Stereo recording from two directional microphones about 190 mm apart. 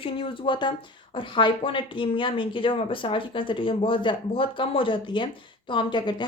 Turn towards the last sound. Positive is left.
turn(degrees=25)  # may be behind; listen again after turning